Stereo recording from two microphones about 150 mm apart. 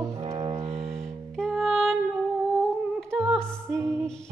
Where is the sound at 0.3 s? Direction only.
25° right (ahead or behind).